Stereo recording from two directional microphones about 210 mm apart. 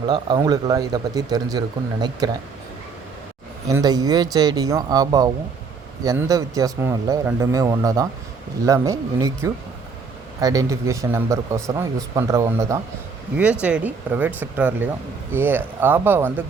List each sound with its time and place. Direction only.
0.1 s speech: 20° right (ahead or behind)
3.7 s speech: 15° right (ahead or behind)